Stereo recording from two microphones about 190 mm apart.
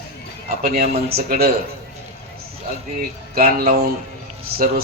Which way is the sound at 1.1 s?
55° right (ahead or behind).